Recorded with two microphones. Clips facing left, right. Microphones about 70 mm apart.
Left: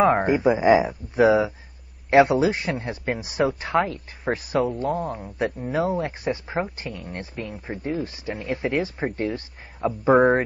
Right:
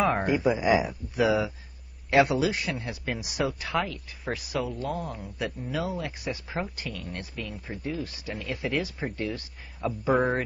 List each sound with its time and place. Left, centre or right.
0.0 s a man's voice: left
5.1 s a man's voice: left
7.3 s a man's voice: left